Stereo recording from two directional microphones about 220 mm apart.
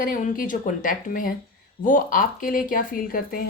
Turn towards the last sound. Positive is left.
turn(degrees=40)  # may be behind; listen again after turning